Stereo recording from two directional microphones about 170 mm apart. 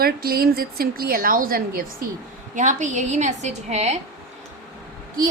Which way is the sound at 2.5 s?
45° right (ahead or behind).